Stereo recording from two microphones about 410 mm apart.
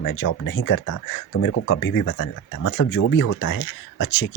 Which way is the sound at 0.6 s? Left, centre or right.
Left.